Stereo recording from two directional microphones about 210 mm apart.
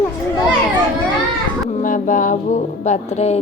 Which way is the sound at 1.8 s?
40° left (ahead or behind).